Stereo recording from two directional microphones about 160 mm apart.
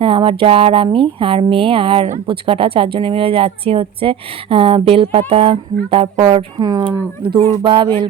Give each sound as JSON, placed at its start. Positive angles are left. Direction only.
{"t": 0.0, "sound": "speech", "side_deg": -35}
{"t": 6.6, "sound": "speech", "side_deg": -25}